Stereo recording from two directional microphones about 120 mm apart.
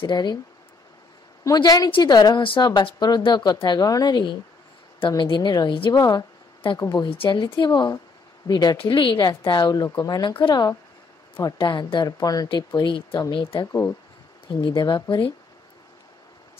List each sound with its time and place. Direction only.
0.0 s a woman's voice: 35° left (ahead or behind)
1.4 s a woman's voice: 30° left (ahead or behind)
11.5 s a woman's voice: 40° left (ahead or behind)
13.7 s speech: 25° left (ahead or behind)
14.6 s a woman's voice: 40° left (ahead or behind)